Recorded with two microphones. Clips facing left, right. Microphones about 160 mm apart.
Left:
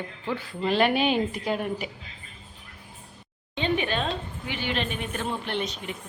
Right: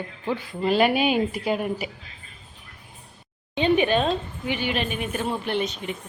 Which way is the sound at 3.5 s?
15° right (ahead or behind).